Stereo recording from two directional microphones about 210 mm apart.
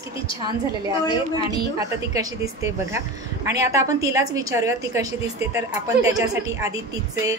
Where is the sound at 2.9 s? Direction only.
15° right (ahead or behind).